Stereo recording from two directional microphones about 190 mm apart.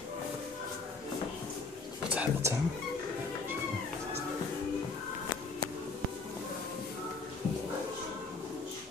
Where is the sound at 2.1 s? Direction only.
10° right (ahead or behind).